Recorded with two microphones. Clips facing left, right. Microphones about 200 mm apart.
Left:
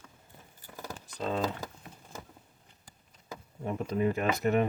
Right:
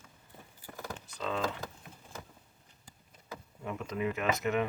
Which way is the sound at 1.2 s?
40° left (ahead or behind).